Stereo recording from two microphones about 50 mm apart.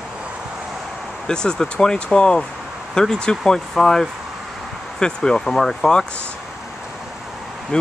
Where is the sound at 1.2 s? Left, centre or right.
Centre.